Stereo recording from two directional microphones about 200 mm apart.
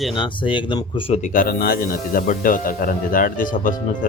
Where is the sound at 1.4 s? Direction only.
45° left (ahead or behind).